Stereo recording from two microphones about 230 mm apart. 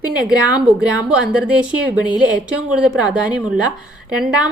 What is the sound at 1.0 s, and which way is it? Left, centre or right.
A woman's voice, centre.